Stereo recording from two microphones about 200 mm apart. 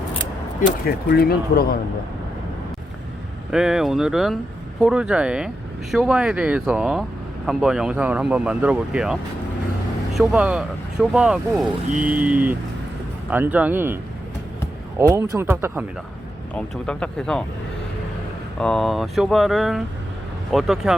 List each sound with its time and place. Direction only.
0.6 s speech: 50° left (ahead or behind)
3.5 s speech: 5° right (ahead or behind)
10.2 s speech: 5° right (ahead or behind)
15.1 s speech: 10° right (ahead or behind)
16.6 s speech: 5° left (ahead or behind)
18.6 s speech: centre (ahead or behind)